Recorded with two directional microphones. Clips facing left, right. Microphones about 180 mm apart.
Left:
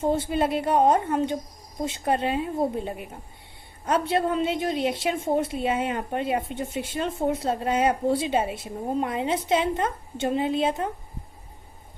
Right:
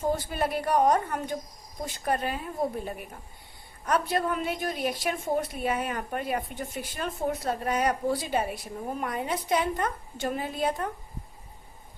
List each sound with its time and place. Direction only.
0.0 s a woman's voice: 25° left (ahead or behind)